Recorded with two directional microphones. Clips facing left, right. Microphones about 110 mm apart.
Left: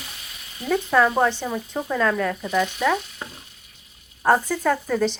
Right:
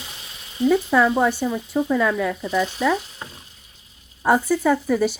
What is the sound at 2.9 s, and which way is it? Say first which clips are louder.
Stir: right 1 dB; 30° right (ahead or behind).